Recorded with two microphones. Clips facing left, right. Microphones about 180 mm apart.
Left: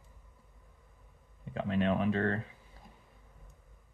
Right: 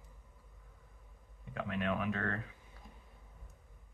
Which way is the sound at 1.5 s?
30° left (ahead or behind).